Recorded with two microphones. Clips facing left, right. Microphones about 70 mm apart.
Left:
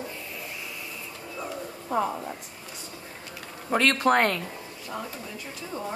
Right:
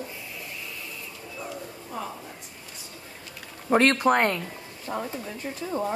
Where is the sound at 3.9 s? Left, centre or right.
Centre.